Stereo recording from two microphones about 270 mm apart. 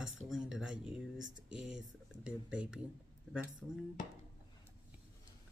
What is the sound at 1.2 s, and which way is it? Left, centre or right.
Speech, right.